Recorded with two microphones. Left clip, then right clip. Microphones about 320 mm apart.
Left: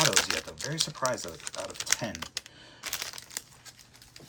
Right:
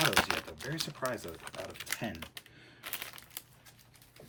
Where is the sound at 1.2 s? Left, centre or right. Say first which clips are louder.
Left 5 dB; centre.